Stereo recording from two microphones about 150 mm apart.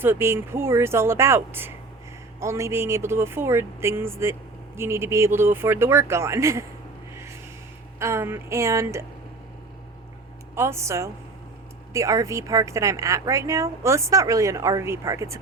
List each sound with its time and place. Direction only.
0.0 s speech: 15° right (ahead or behind)
7.9 s a woman's voice: 20° right (ahead or behind)
10.5 s a woman's voice: 15° right (ahead or behind)